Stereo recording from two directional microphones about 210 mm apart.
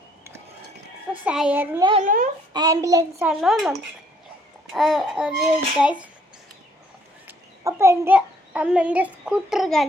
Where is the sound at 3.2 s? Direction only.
Centre (ahead or behind).